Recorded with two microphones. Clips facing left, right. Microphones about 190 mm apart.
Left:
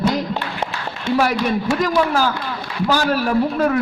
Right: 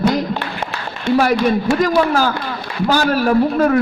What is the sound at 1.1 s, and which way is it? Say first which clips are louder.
Speech: right 4 dB; 45° right (ahead or behind).